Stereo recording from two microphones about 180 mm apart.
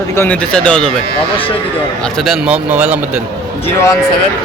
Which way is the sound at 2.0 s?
Centre (ahead or behind).